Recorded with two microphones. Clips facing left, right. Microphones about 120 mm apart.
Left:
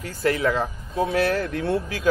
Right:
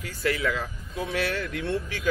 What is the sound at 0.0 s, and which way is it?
Speech, 40° left (ahead or behind).